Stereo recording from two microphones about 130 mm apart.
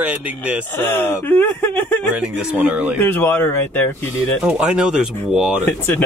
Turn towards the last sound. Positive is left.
turn(degrees=15)  # may be behind; listen again after turning